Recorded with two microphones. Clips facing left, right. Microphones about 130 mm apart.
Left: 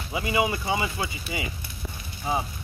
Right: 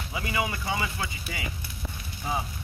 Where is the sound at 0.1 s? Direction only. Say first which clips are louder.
Left 5 dB; 15° left (ahead or behind).